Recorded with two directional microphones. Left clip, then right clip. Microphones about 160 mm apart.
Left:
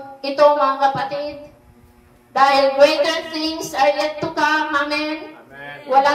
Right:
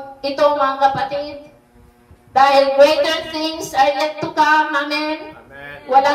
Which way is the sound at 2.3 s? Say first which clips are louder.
Right 3 dB; 45° right (ahead or behind).